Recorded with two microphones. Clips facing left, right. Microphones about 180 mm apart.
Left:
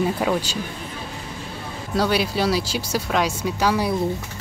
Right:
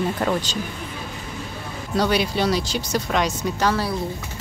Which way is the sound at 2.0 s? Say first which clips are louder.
Even; 5° left (ahead or behind).